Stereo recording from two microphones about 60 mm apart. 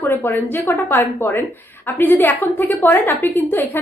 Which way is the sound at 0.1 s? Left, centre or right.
Left.